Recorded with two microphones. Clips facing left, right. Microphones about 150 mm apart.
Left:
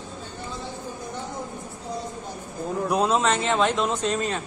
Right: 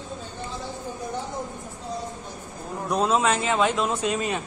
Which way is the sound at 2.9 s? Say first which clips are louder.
Even; centre (ahead or behind).